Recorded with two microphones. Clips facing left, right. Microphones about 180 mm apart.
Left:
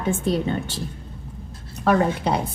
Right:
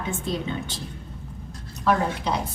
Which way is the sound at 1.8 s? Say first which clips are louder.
Left 4 dB; 55° left (ahead or behind).